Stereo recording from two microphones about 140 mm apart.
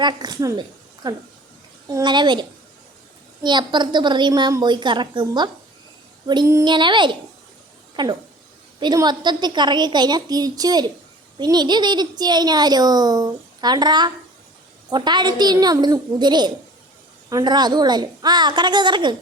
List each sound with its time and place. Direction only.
0.0 s a woman's voice: 30° right (ahead or behind)
1.9 s a woman's voice: 30° right (ahead or behind)
6.2 s female singing: 30° right (ahead or behind)
6.7 s a woman's voice: 35° right (ahead or behind)